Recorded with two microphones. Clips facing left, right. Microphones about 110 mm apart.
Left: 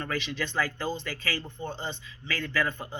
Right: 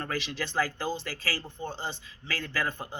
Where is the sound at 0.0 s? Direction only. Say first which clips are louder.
Left 1 dB; 35° right (ahead or behind).